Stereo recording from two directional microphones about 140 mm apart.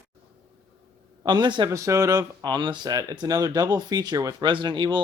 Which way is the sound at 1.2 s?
35° right (ahead or behind).